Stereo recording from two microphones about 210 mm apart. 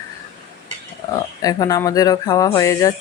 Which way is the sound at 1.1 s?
15° left (ahead or behind).